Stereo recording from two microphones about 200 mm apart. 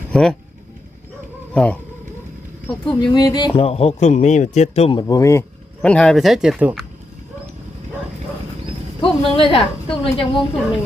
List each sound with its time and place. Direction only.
0.1 s speech: 5° left (ahead or behind)
1.5 s speech: 5° left (ahead or behind)
2.6 s speech: 25° left (ahead or behind); by 6.7 s 5° right (ahead or behind)
9.0 s speech: 25° left (ahead or behind)